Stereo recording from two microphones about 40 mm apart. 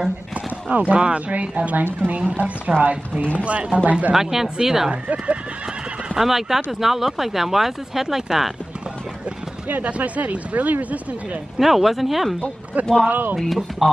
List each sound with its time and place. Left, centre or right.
0.7 s speech: right
0.9 s speech: right
1.3 s speech: right
3.4 s speech: right
4.1 s speech: centre
5.0 s speech: right
6.1 s speech: centre
9.7 s speech: right
11.5 s speech: centre
13.0 s speech: right
13.5 s speech: centre